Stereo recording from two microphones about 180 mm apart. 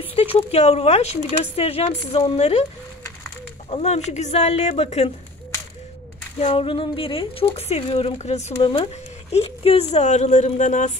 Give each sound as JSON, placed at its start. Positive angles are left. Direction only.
{"t": 0.1, "sound": "speech", "side_deg": 35}
{"t": 3.7, "sound": "speech", "side_deg": 35}
{"t": 6.4, "sound": "speech", "side_deg": 30}